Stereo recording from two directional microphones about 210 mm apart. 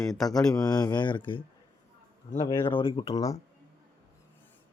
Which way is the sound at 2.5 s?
20° left (ahead or behind).